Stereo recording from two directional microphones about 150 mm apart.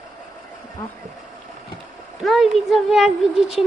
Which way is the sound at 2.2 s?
Centre (ahead or behind).